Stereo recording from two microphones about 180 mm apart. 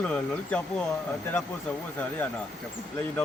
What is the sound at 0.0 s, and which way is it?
Speech, 5° left (ahead or behind).